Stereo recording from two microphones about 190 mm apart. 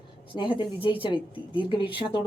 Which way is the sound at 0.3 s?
25° left (ahead or behind).